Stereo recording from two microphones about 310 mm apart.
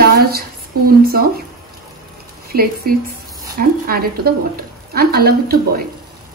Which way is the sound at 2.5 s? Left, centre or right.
Right.